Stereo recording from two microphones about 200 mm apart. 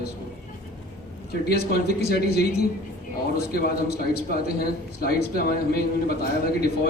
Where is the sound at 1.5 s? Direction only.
55° left (ahead or behind).